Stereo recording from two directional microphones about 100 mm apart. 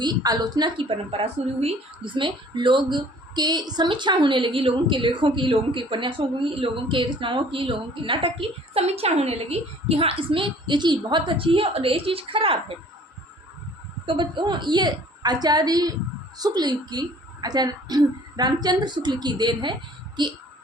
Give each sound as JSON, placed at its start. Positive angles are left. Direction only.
{"t": 0.0, "sound": "a woman's voice", "side_deg": -40}
{"t": 0.8, "sound": "speech", "side_deg": -60}
{"t": 2.1, "sound": "speech", "side_deg": -55}
{"t": 14.1, "sound": "a woman's voice", "side_deg": -55}